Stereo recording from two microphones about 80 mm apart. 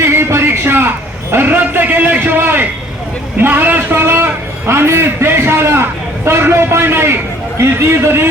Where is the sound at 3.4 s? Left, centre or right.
Right.